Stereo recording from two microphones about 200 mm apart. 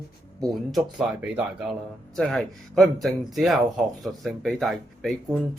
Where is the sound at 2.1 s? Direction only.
Centre (ahead or behind).